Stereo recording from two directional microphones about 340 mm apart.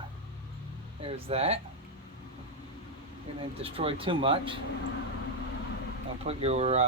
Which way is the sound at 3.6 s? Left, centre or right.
Centre.